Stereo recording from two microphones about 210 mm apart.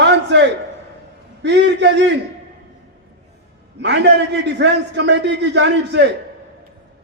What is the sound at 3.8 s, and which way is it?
A man's voice, 55° right (ahead or behind).